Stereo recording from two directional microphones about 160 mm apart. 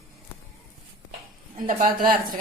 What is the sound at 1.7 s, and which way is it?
Speech, 55° right (ahead or behind).